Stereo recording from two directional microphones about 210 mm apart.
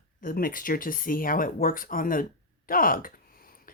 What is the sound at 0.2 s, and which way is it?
Speech, 40° left (ahead or behind).